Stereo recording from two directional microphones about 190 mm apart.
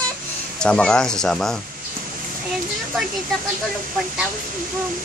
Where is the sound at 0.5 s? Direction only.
5° left (ahead or behind).